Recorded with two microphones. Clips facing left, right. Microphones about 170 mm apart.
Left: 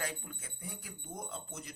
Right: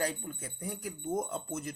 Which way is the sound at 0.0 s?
40° right (ahead or behind).